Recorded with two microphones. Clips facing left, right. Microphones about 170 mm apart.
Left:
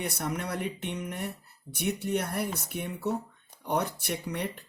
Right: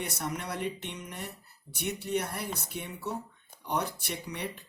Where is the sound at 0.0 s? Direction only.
60° left (ahead or behind).